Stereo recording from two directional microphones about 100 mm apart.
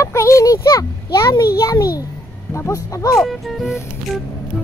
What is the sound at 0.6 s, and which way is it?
Speech, 45° left (ahead or behind).